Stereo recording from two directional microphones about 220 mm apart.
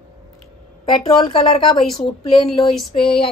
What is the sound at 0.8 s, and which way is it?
Speech, 20° left (ahead or behind).